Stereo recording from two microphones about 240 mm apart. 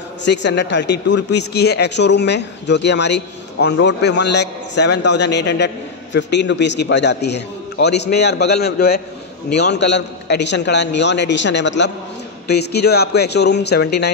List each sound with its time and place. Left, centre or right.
0.2 s speech: left